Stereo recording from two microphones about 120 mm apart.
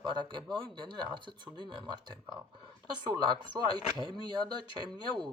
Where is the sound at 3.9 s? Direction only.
40° right (ahead or behind).